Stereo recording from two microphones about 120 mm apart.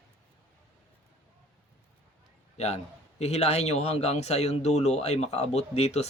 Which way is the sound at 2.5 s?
65° left (ahead or behind).